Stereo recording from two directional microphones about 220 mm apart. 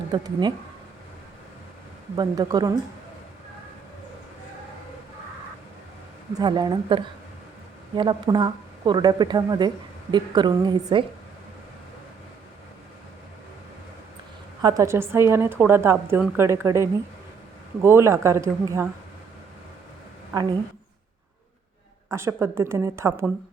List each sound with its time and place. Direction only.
0.1 s speech: 20° right (ahead or behind)
2.1 s a woman's voice: 20° right (ahead or behind)
6.4 s speech: 20° right (ahead or behind)
14.6 s a woman's voice: 15° right (ahead or behind)
20.3 s a woman's voice: 15° right (ahead or behind)
22.1 s a woman's voice: 10° right (ahead or behind)